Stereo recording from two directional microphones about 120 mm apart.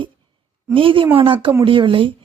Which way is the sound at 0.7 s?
45° right (ahead or behind).